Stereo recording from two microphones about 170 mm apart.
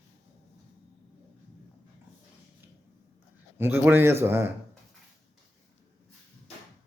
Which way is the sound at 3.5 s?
15° right (ahead or behind).